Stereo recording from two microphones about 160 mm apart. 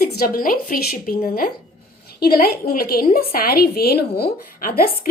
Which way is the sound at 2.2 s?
70° left (ahead or behind).